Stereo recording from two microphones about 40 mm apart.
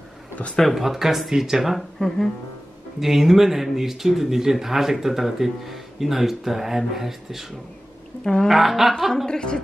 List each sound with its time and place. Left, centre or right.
0.6 s speech: centre
1.8 s speech: centre
3.0 s speech: centre
8.2 s speech: centre
8.5 s speech: centre
9.1 s a woman's voice: centre